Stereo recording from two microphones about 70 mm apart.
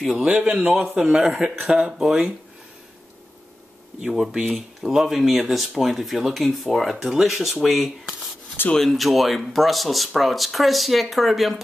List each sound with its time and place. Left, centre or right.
0.2 s speech: centre
4.0 s speech: centre